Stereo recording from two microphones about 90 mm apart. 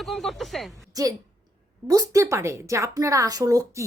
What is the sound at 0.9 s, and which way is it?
A woman's voice, 40° right (ahead or behind).